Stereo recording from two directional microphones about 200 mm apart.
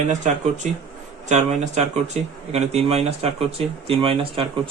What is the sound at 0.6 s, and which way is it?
Speech, 35° right (ahead or behind).